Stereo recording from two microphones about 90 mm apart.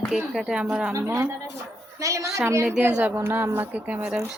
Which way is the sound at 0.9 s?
30° right (ahead or behind).